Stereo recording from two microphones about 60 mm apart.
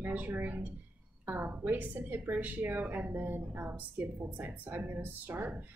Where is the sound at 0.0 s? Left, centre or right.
Right.